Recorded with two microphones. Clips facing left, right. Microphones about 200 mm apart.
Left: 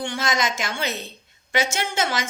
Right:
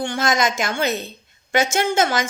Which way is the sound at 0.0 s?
45° right (ahead or behind).